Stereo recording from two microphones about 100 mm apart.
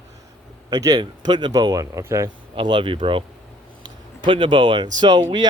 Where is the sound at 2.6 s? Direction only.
55° right (ahead or behind).